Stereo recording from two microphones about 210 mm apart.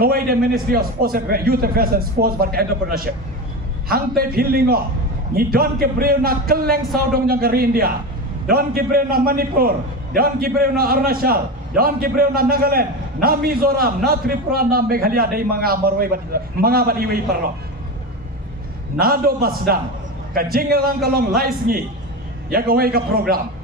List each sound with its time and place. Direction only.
0.0 s a man's voice: 45° right (ahead or behind)
3.9 s a man's voice: 45° right (ahead or behind)
18.9 s a man's voice: 45° right (ahead or behind)